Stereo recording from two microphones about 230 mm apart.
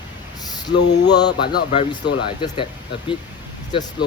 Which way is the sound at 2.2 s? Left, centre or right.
Left.